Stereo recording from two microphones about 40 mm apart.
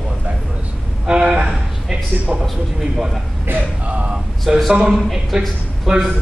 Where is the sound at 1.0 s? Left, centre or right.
Right.